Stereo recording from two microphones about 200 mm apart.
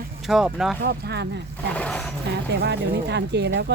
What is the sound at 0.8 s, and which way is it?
Speech, 55° right (ahead or behind).